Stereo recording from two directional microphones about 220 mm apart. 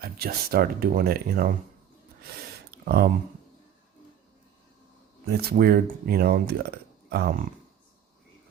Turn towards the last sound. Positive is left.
turn(degrees=-45)  # may be behind; listen again after turning